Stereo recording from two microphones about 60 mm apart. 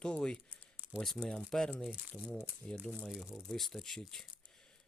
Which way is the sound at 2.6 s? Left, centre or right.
Centre.